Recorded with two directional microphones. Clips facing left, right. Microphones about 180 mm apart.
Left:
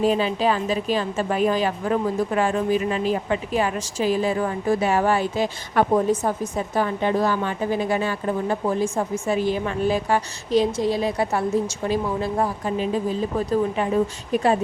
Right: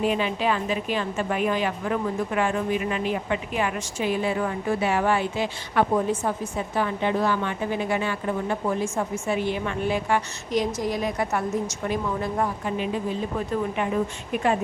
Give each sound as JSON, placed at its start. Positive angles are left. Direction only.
{"t": 0.0, "sound": "a woman's voice", "side_deg": 35}